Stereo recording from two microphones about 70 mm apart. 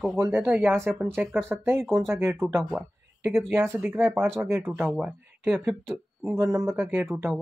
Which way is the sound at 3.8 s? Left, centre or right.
Right.